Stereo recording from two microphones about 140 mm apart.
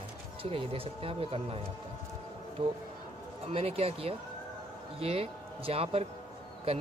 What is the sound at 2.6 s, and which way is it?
Speech, 35° right (ahead or behind).